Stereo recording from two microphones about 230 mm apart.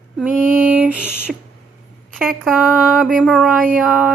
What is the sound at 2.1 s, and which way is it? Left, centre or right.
A woman's voice, centre.